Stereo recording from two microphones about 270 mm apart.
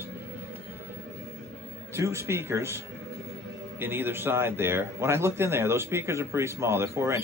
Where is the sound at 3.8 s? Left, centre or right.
Centre.